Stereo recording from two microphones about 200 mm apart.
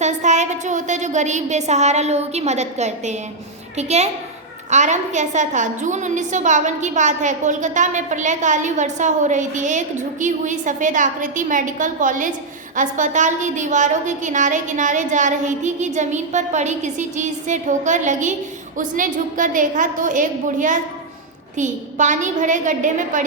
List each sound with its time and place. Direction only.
0.0 s a woman's voice: 35° right (ahead or behind)